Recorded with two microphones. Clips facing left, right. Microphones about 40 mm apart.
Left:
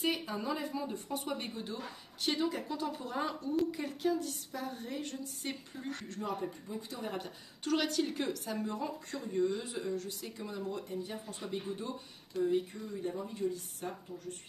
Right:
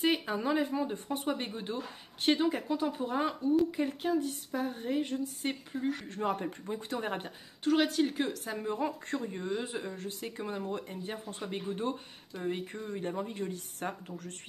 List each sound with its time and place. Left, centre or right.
0.0 s speech: right
2.7 s speech: right
6.2 s speech: right
7.6 s speech: centre
8.5 s speech: right